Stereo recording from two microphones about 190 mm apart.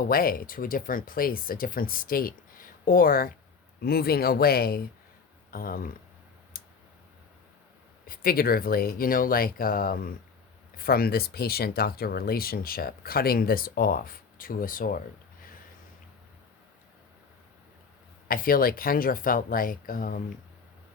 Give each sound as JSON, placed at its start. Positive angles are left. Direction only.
{"t": 0.0, "sound": "speech", "side_deg": 50}
{"t": 6.5, "sound": "tick-tock", "side_deg": 50}
{"t": 8.0, "sound": "speech", "side_deg": 50}
{"t": 18.3, "sound": "speech", "side_deg": 50}